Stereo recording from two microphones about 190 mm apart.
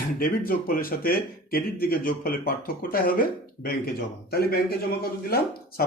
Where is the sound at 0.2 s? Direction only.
50° left (ahead or behind).